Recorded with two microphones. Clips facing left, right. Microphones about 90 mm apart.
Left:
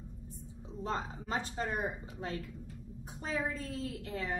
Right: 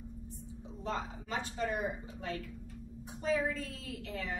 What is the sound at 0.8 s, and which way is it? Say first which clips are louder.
A woman's voice: left 1 dB; 40° left (ahead or behind).